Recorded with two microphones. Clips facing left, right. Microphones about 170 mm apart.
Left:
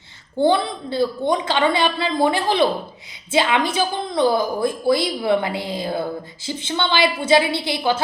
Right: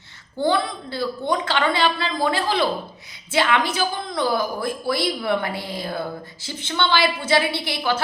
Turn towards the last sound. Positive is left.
turn(degrees=20)  # may be behind; listen again after turning